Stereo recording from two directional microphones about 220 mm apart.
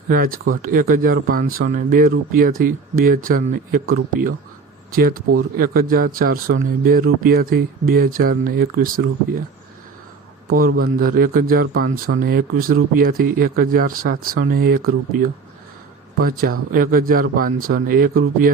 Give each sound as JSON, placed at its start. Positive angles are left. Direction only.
{"t": 0.6, "sound": "speech", "side_deg": -40}
{"t": 10.5, "sound": "speech", "side_deg": -40}
{"t": 16.2, "sound": "speech", "side_deg": -40}